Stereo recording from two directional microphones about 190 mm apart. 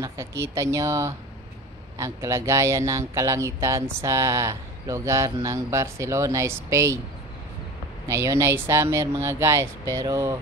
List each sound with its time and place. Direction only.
0.4 s speech: 15° right (ahead or behind)
8.1 s speech: 15° right (ahead or behind)